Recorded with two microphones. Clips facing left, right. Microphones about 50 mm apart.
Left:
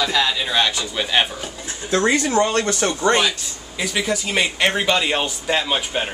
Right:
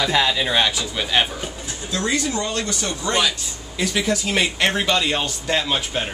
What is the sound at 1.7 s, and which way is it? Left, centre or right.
A man's voice, left.